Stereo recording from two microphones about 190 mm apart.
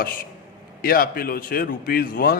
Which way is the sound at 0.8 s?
50° left (ahead or behind).